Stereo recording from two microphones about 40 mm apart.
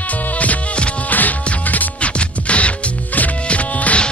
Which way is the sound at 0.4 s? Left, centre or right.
Left.